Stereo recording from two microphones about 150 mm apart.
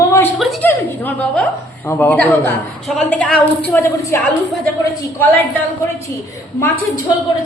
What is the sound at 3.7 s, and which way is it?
Speech, 15° left (ahead or behind).